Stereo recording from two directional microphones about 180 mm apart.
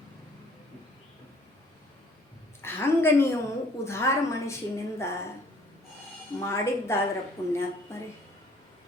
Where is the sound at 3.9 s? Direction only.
15° left (ahead or behind).